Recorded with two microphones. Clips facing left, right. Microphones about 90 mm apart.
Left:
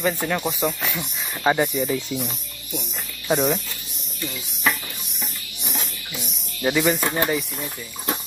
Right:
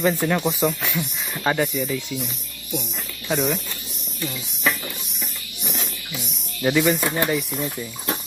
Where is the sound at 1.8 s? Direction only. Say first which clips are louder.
Left 2 dB; 35° left (ahead or behind).